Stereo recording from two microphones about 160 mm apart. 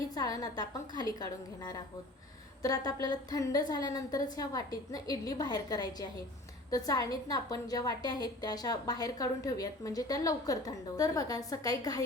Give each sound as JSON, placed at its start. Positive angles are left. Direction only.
{"t": 0.1, "sound": "a woman's voice", "side_deg": 25}